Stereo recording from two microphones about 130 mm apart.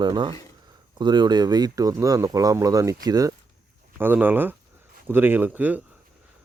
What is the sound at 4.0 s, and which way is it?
Speech, 15° right (ahead or behind).